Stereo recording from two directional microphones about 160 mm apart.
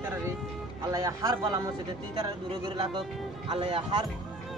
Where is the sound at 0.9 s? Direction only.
20° right (ahead or behind).